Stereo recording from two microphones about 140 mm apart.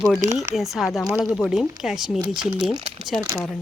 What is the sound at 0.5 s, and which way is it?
Speech, centre (ahead or behind).